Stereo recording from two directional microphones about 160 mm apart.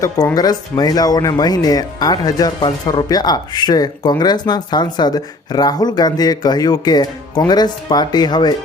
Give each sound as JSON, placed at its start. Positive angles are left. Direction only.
{"t": 0.0, "sound": "speech", "side_deg": 20}